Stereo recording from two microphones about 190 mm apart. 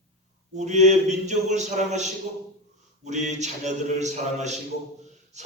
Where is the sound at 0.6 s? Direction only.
35° right (ahead or behind).